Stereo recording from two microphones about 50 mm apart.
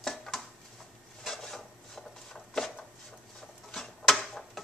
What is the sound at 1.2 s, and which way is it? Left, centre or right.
Wood, centre.